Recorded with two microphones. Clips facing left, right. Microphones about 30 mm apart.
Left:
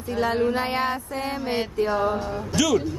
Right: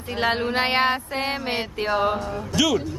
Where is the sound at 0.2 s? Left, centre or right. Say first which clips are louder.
Right 1 dB; right.